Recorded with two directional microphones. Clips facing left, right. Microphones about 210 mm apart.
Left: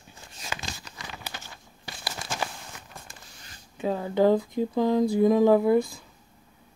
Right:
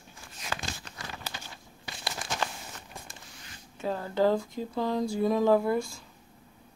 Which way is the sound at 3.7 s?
15° left (ahead or behind).